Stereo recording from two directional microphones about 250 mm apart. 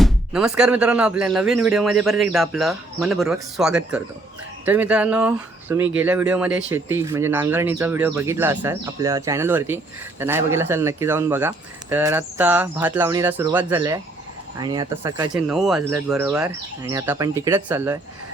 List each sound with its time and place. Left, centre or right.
0.0 s speech: centre
15.4 s speech: centre